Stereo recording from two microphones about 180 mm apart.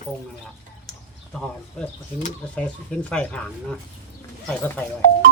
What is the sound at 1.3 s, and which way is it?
Speech, 5° left (ahead or behind).